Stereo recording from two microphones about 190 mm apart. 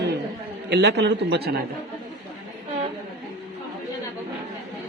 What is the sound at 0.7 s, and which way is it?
Speech, 60° right (ahead or behind).